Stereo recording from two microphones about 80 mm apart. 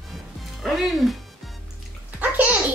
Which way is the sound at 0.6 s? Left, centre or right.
Centre.